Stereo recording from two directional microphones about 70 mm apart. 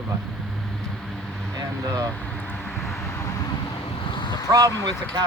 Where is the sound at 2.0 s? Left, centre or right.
Centre.